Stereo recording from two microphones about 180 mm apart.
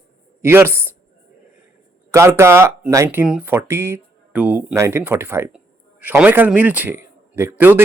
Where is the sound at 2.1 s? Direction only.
15° right (ahead or behind).